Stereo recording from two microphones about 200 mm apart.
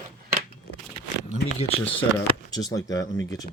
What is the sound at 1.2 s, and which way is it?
Speech, 35° left (ahead or behind).